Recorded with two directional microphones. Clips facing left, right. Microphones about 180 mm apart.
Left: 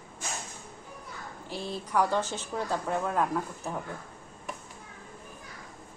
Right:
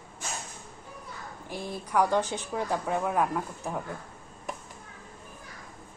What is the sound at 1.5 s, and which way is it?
Speech, 15° right (ahead or behind).